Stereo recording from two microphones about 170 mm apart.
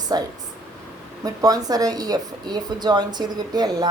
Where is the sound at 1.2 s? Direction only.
20° right (ahead or behind).